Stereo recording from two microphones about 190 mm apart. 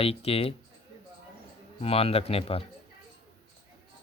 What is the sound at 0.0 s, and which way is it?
Speech, 30° left (ahead or behind).